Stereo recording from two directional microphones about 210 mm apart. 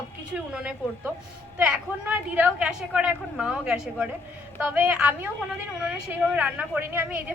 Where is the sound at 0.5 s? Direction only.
5° right (ahead or behind).